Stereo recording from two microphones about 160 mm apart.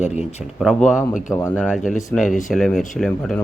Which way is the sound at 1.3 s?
15° left (ahead or behind).